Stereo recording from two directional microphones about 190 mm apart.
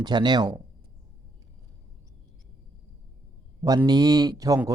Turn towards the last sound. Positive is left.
turn(degrees=-15)  # may be behind; listen again after turning